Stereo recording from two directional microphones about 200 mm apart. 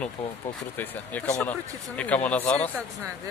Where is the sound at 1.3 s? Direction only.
5° left (ahead or behind).